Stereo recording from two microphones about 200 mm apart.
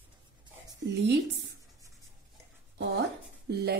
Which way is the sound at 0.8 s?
60° right (ahead or behind).